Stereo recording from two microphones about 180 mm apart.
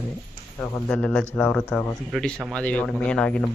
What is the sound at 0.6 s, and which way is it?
A man's voice, 10° left (ahead or behind).